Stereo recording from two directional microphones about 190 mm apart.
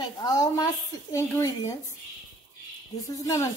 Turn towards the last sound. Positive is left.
turn(degrees=15)  # may be behind; listen again after turning